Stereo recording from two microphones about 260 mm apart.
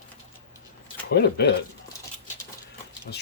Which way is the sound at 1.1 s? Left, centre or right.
Left.